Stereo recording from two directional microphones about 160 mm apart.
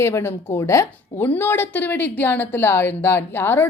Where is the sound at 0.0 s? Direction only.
15° left (ahead or behind).